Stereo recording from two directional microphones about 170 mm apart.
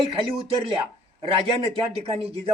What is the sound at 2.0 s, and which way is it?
Speech, 35° right (ahead or behind).